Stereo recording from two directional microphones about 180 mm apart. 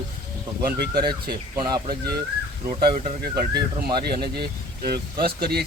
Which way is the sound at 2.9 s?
45° right (ahead or behind).